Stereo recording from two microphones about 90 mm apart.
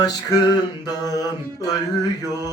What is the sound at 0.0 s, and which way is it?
Mantra, 45° left (ahead or behind).